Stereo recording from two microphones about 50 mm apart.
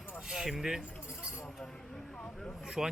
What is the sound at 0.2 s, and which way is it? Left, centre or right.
Speech, centre.